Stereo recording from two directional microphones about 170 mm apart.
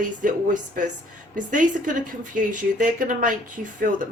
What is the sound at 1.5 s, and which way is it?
A woman's voice, 50° right (ahead or behind).